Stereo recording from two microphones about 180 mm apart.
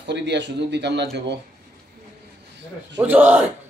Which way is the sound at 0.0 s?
70° right (ahead or behind).